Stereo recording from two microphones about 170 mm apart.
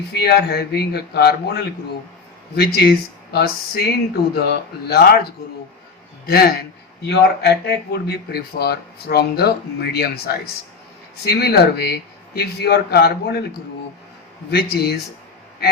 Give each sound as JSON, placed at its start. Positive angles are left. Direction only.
{"t": 0.1, "sound": "speech", "side_deg": 70}
{"t": 6.2, "sound": "speech", "side_deg": 70}
{"t": 14.5, "sound": "speech", "side_deg": 70}